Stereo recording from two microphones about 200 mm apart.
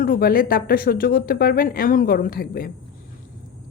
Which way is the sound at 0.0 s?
45° left (ahead or behind).